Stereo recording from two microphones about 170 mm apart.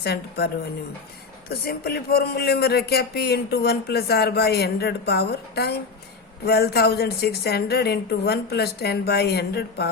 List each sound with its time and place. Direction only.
0.0 s speech: 70° left (ahead or behind)